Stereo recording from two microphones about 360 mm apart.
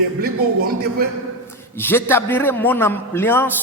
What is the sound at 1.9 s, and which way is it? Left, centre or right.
A man's voice, centre.